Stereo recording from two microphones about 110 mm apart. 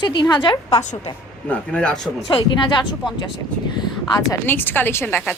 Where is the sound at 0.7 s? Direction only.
80° left.